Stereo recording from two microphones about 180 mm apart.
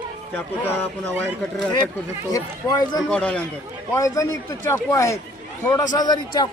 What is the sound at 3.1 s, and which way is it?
Speech, 5° left (ahead or behind).